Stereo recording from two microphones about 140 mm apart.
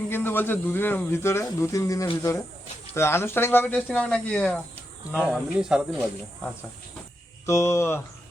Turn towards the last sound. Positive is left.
turn(degrees=20)  # may be behind; listen again after turning